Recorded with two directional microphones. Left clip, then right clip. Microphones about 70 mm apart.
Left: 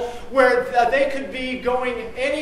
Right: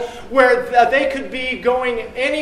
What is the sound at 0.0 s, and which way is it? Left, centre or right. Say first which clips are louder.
A man's voice: right 3 dB; right.